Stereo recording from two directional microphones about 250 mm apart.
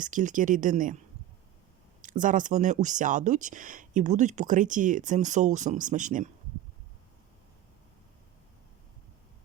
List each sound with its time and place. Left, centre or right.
0.0 s speech: right
2.0 s speech: right